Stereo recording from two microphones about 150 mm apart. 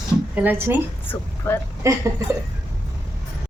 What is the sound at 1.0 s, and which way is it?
Speech, 15° left (ahead or behind).